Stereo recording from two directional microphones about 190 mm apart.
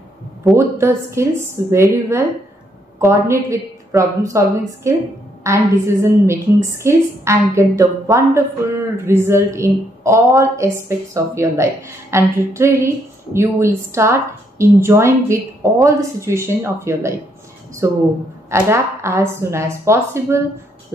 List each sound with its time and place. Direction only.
0.6 s a woman's voice: 15° right (ahead or behind)